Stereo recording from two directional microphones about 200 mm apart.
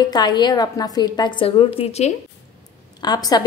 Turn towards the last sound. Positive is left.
turn(degrees=20)  # may be behind; listen again after turning